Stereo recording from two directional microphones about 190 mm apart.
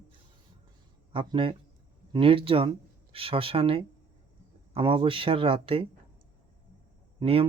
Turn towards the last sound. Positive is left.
turn(degrees=-30)  # may be behind; listen again after turning